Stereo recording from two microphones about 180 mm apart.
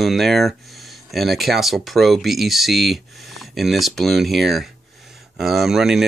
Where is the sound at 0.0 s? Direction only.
Centre (ahead or behind).